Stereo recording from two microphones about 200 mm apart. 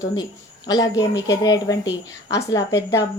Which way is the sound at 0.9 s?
15° left (ahead or behind).